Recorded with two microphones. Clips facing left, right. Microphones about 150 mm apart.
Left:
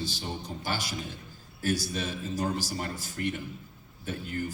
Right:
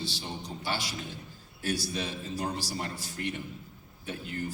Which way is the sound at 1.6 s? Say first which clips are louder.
Left 2 dB; 45° left (ahead or behind).